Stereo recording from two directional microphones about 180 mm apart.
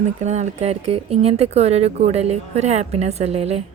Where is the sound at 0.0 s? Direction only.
40° right (ahead or behind).